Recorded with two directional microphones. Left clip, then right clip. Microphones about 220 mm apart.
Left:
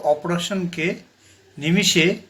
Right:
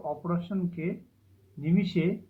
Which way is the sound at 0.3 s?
60° left (ahead or behind).